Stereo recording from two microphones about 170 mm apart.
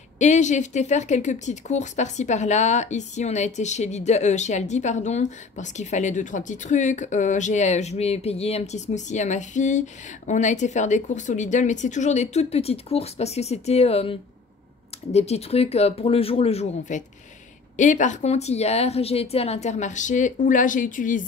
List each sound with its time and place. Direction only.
0.2 s speech: 45° left (ahead or behind)